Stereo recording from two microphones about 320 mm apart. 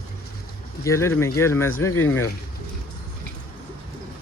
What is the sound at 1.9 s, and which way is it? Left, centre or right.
Speech, left.